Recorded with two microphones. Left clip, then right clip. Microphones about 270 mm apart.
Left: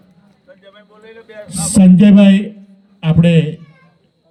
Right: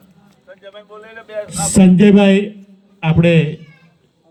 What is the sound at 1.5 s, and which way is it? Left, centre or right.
A man's voice, centre.